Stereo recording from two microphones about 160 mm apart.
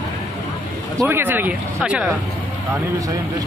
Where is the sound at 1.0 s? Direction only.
10° right (ahead or behind).